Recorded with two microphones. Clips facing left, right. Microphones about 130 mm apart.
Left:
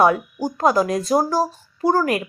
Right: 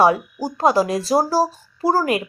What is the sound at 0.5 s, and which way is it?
Speech, 25° right (ahead or behind).